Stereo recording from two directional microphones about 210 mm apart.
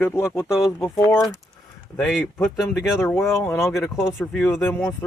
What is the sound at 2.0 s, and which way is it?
Speech, 5° left (ahead or behind).